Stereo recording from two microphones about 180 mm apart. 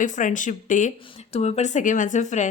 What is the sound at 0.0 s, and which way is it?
A woman's voice, 45° left (ahead or behind).